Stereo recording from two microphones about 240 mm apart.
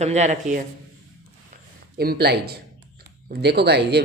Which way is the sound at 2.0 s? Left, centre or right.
Right.